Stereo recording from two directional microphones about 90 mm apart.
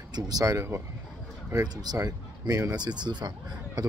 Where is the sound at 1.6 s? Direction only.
45° right (ahead or behind).